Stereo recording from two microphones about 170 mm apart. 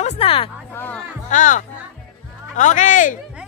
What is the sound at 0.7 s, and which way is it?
Speech, 10° left (ahead or behind).